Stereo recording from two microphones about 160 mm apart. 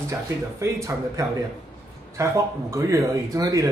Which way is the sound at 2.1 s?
20° right (ahead or behind).